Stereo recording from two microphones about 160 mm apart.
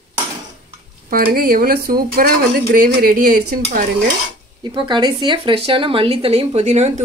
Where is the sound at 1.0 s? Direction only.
65° right (ahead or behind).